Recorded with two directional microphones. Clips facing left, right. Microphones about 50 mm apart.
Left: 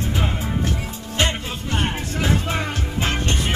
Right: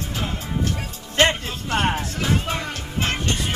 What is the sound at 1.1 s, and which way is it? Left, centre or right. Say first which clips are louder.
Music: right 4 dB; right.